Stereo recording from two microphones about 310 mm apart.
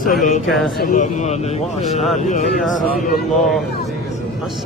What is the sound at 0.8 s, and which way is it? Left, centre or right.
Speech, left.